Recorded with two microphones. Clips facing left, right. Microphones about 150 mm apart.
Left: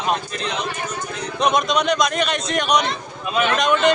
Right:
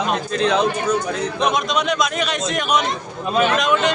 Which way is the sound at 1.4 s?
Centre (ahead or behind).